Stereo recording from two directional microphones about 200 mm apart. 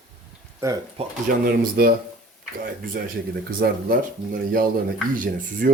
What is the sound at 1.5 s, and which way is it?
Speech, 50° right (ahead or behind).